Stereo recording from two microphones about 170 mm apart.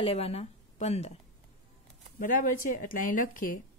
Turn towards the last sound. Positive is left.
turn(degrees=50)  # may be behind; listen again after turning